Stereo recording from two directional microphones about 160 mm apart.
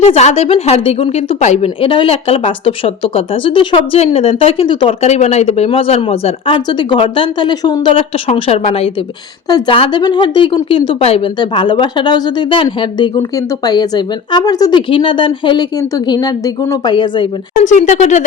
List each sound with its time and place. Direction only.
0.0 s a woman's voice: 40° left (ahead or behind)
5.0 s a woman's voice: 45° left (ahead or behind); by 8.0 s 25° left (ahead or behind)
8.3 s a woman's voice: 45° left (ahead or behind)
9.5 s a woman's voice: 30° left (ahead or behind)
13.7 s a woman's voice: 25° left (ahead or behind)
17.6 s speech: 50° left (ahead or behind)